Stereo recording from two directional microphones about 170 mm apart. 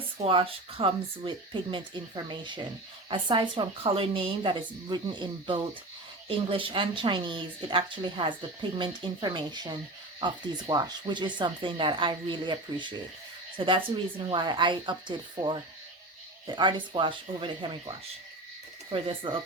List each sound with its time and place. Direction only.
0.3 s a woman's voice: 30° right (ahead or behind)
18.9 s a woman's voice: 30° right (ahead or behind)